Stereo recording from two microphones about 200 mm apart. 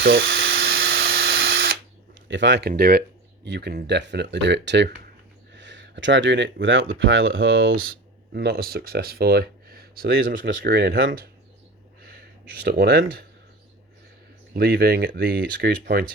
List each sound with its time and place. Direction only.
0.0 s dental drill: 55° right (ahead or behind)
2.2 s speech: 65° right (ahead or behind); by 7.3 s 85° right
7.9 s speech: 55° right (ahead or behind)
12.0 s speech: 55° right (ahead or behind)
14.5 s speech: 50° right (ahead or behind)